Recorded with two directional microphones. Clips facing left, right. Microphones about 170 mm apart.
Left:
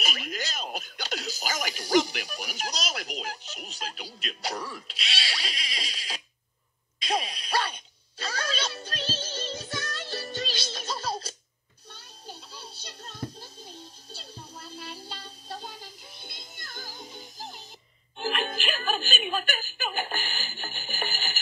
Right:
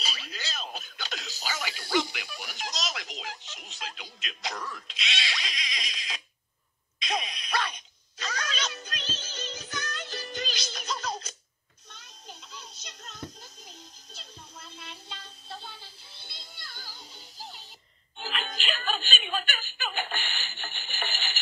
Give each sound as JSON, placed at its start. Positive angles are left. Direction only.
{"t": 0.0, "sound": "a sound", "side_deg": 50}
{"t": 4.8, "sound": "pig", "side_deg": 35}
{"t": 7.0, "sound": "dog", "side_deg": 35}
{"t": 8.2, "sound": "music", "side_deg": 35}